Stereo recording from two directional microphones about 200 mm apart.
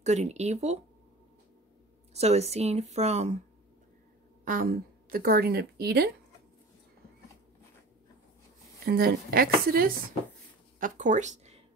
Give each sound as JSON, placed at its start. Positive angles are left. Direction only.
{"t": 0.0, "sound": "speech", "side_deg": -35}
{"t": 2.1, "sound": "speech", "side_deg": -30}
{"t": 4.5, "sound": "a woman's voice", "side_deg": -45}
{"t": 8.8, "sound": "a woman's voice", "side_deg": -50}